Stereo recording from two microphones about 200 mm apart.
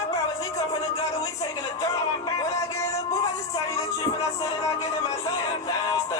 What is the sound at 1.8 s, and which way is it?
Music, 15° left (ahead or behind).